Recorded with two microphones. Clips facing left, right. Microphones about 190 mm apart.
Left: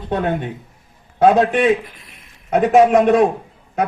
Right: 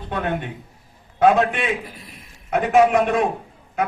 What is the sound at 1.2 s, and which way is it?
A man's voice, 35° left (ahead or behind).